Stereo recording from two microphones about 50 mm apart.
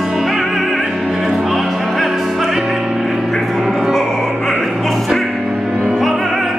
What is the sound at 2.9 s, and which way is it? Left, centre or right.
Music, centre.